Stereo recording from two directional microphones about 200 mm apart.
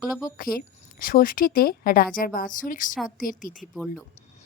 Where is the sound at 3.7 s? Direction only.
Centre (ahead or behind).